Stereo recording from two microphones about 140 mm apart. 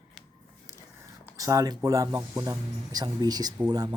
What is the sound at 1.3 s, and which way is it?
Speech, 25° right (ahead or behind).